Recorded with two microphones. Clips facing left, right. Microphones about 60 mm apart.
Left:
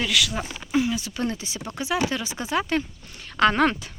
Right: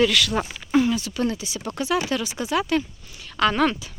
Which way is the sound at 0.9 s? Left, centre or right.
Left.